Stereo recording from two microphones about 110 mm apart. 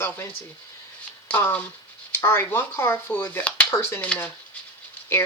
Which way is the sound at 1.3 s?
15° left (ahead or behind).